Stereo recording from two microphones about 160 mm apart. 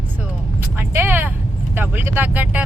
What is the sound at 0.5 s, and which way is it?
A woman's voice, 15° right (ahead or behind).